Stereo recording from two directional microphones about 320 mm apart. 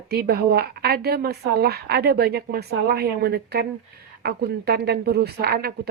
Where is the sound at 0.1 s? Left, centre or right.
Right.